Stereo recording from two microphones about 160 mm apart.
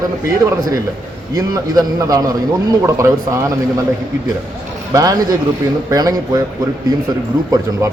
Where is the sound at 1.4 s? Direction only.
25° right (ahead or behind).